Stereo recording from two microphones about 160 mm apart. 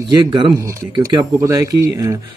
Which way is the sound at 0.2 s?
30° right (ahead or behind).